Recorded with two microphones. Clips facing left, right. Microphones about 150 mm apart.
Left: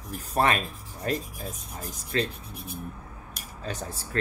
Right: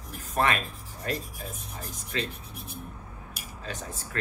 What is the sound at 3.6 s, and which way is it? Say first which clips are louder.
Speech: left 3 dB; 35° left (ahead or behind).